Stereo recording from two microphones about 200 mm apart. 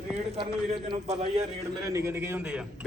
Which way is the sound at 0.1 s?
30° right (ahead or behind).